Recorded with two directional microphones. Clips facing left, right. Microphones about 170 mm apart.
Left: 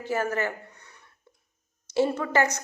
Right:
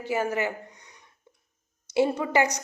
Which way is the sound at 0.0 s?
15° right (ahead or behind).